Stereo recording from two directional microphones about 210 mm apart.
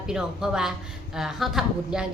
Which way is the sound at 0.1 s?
5° right (ahead or behind).